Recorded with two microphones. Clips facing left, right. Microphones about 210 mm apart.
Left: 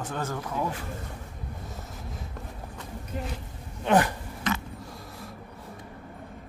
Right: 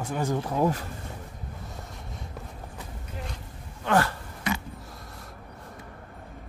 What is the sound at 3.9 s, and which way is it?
Speech, 15° left (ahead or behind).